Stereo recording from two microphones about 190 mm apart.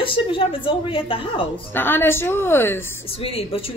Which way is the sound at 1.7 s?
10° left (ahead or behind).